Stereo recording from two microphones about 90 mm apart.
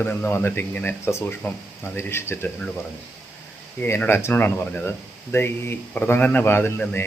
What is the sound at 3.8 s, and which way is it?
Speech, 20° left (ahead or behind).